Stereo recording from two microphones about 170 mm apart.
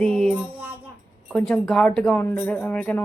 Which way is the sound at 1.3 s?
5° left (ahead or behind).